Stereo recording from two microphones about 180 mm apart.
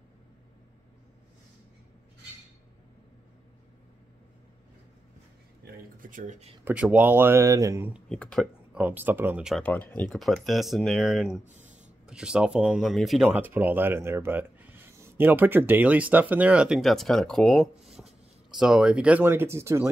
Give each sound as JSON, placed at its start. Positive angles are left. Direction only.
{"t": 5.9, "sound": "speech", "side_deg": -50}
{"t": 6.6, "sound": "speech", "side_deg": -10}
{"t": 7.9, "sound": "speech", "side_deg": 5}
{"t": 8.7, "sound": "speech", "side_deg": -10}
{"t": 9.6, "sound": "speech", "side_deg": 10}